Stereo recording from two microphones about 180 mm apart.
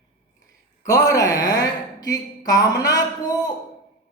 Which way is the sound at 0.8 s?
20° left (ahead or behind).